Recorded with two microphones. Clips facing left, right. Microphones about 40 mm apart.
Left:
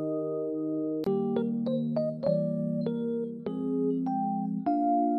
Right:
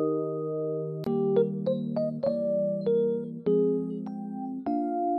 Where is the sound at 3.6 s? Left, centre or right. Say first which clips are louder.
Right 4 dB; left.